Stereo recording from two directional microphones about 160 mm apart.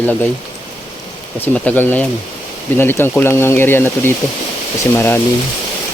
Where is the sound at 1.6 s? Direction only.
10° left (ahead or behind).